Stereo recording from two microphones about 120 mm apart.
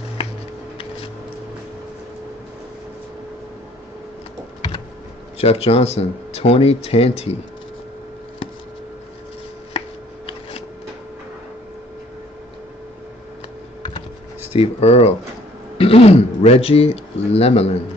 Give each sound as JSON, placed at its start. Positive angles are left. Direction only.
{"t": 5.4, "sound": "speech", "side_deg": 55}
{"t": 9.8, "sound": "shuffling cards", "side_deg": 50}
{"t": 14.5, "sound": "speech", "side_deg": 60}